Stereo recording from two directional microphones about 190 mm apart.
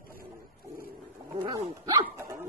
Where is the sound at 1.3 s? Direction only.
20° right (ahead or behind).